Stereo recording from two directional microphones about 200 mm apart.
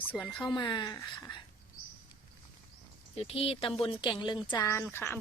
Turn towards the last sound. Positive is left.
turn(degrees=10)  # may be behind; listen again after turning